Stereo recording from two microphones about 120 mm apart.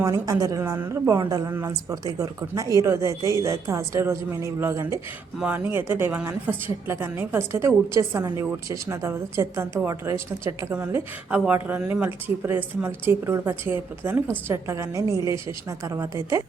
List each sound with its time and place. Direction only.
0.0 s speech: 30° right (ahead or behind)
5.4 s speech: 15° right (ahead or behind)
11.3 s speech: 10° right (ahead or behind)